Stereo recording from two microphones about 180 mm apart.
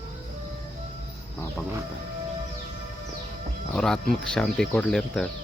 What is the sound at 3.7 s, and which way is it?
Speech, 5° left (ahead or behind).